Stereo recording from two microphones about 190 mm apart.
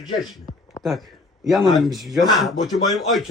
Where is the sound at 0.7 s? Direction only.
Centre (ahead or behind).